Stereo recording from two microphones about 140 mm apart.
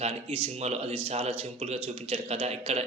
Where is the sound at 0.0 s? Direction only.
45° right (ahead or behind).